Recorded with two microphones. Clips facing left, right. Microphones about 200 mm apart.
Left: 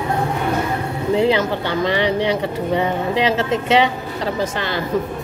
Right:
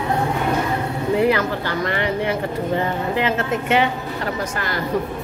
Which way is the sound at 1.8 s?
90° left.